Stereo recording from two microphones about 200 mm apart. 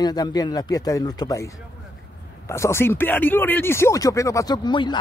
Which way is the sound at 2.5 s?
15° left (ahead or behind).